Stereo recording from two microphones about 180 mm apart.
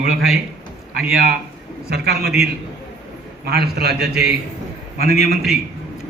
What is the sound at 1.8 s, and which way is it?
Speech, 65° right (ahead or behind).